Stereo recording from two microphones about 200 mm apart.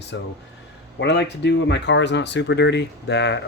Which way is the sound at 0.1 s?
65° left (ahead or behind).